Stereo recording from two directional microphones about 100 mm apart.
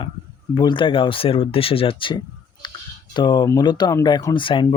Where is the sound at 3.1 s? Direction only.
45° left (ahead or behind).